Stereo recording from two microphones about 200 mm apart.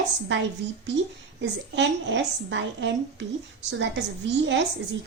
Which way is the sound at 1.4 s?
60° right (ahead or behind).